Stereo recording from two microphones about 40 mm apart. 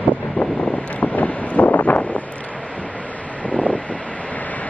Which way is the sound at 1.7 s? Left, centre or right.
Left.